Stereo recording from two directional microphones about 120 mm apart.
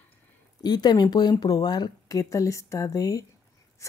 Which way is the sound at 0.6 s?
35° left (ahead or behind).